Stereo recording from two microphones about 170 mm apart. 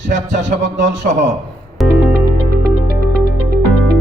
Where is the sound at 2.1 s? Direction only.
60° right (ahead or behind).